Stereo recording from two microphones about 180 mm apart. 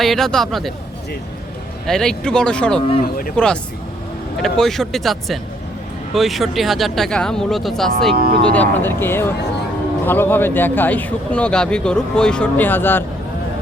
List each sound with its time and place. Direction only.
0.0 s speech: centre (ahead or behind)
1.9 s speech: 5° left (ahead or behind)
8.1 s speech: 55° right (ahead or behind)
8.5 s speech: 10° left (ahead or behind)